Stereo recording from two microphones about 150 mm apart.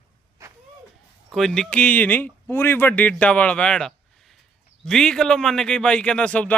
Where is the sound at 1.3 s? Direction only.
Centre (ahead or behind).